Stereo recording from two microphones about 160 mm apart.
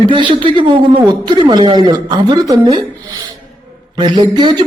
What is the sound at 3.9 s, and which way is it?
Speech, 30° right (ahead or behind).